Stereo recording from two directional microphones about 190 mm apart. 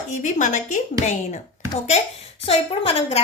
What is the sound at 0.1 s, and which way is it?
Speech, 40° left (ahead or behind).